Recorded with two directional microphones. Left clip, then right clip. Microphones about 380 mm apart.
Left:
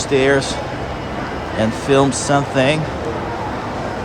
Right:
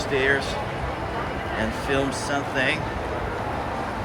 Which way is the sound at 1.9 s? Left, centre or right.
Centre.